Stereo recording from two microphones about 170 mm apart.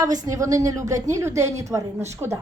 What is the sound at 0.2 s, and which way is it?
A woman's voice, 20° right (ahead or behind).